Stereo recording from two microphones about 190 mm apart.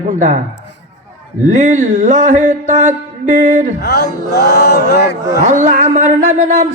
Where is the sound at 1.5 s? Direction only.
40° right (ahead or behind).